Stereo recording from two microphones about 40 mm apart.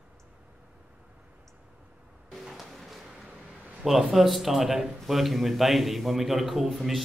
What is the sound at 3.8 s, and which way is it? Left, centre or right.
A man's voice, centre.